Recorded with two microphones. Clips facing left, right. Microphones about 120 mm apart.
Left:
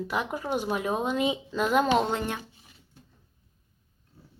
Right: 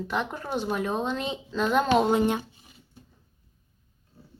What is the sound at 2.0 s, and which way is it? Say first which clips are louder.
Speech: right 7 dB; 15° right (ahead or behind).